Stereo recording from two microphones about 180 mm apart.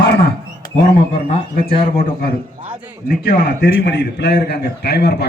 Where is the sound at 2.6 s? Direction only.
10° right (ahead or behind).